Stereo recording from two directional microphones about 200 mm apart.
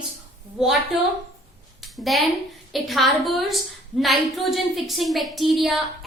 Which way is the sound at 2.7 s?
Centre (ahead or behind).